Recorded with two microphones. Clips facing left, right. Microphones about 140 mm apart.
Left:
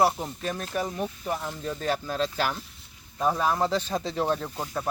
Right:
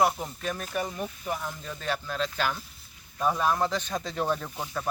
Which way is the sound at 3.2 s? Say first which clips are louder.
Left 1 dB; 5° left (ahead or behind).